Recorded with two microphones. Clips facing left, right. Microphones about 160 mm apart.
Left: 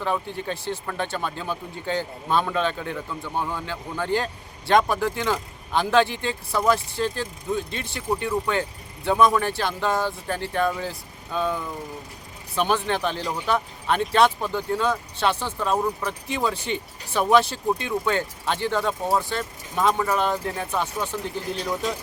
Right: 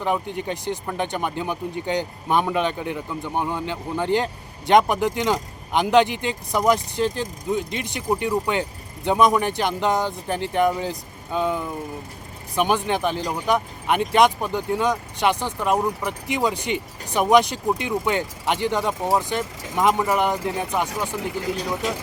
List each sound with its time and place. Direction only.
0.0 s speech: 15° right (ahead or behind)
21.2 s speech: 85° right